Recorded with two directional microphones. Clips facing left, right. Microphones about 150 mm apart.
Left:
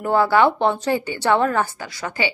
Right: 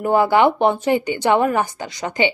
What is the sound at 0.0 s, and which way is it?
A woman's voice, 15° right (ahead or behind).